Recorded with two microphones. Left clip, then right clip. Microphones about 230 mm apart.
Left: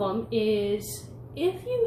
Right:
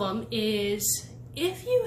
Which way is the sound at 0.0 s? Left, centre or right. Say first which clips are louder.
Left 3 dB; right.